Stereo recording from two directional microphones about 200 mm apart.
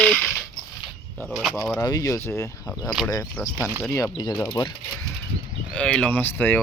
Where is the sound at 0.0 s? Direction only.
5° left (ahead or behind).